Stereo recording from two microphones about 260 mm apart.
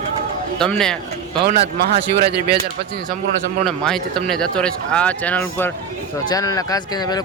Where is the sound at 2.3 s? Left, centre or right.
Right.